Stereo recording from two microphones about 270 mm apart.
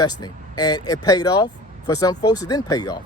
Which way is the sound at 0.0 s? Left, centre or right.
Centre.